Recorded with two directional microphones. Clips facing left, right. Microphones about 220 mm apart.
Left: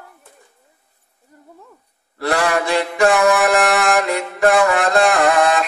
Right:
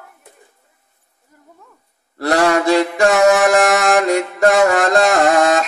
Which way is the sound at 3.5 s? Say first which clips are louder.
Right 2 dB; 45° right (ahead or behind).